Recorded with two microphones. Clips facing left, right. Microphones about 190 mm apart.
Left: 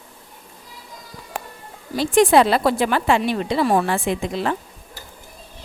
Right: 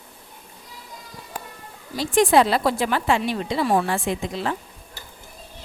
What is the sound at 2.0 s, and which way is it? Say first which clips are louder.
A woman's voice: left 3 dB; 65° left (ahead or behind).